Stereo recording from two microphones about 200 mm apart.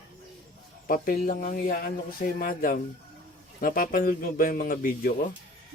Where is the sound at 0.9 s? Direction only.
45° left (ahead or behind).